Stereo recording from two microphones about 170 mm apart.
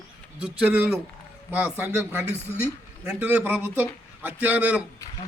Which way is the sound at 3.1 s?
10° right (ahead or behind).